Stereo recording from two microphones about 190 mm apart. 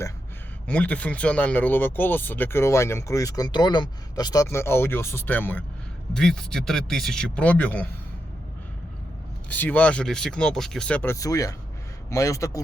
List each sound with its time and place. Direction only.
0.7 s speech: 5° left (ahead or behind)
9.5 s speech: 10° left (ahead or behind)